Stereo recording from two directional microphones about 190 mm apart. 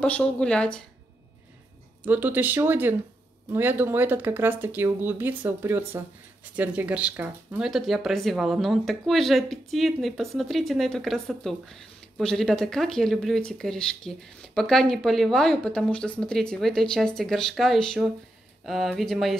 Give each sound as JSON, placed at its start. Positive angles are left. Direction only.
{"t": 0.0, "sound": "speech", "side_deg": 5}
{"t": 2.0, "sound": "speech", "side_deg": -10}